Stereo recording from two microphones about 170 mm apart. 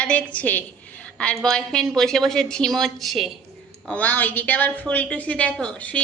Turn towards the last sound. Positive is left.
turn(degrees=5)  # may be behind; listen again after turning